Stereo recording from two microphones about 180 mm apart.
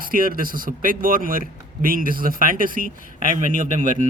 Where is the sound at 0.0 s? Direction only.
50° right (ahead or behind).